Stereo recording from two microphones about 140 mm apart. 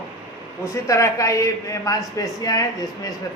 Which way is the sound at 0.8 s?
25° left (ahead or behind).